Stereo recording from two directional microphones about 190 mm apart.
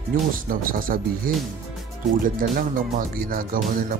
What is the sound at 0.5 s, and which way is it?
A man's voice, 50° right (ahead or behind).